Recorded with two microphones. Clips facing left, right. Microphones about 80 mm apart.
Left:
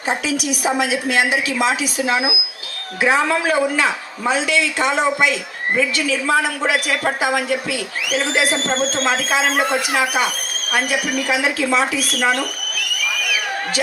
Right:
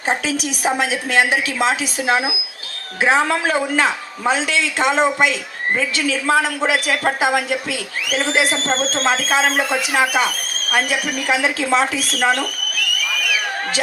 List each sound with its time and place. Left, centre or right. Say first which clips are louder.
0.1 s a woman's voice: even; right
9.5 s speech: left 1 dB; left
9.9 s a woman's voice: right 1 dB; right